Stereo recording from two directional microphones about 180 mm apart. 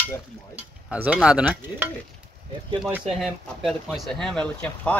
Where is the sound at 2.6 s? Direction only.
25° right (ahead or behind).